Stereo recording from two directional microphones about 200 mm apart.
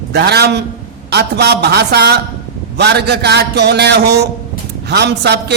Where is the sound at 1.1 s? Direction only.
55° right (ahead or behind).